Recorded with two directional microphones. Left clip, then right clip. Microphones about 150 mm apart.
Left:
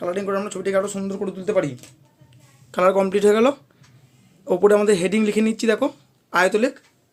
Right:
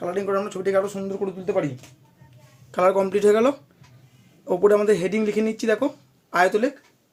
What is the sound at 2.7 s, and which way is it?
Speech, 25° left (ahead or behind).